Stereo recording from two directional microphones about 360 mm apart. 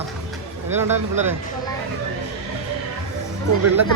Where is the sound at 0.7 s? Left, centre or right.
Centre.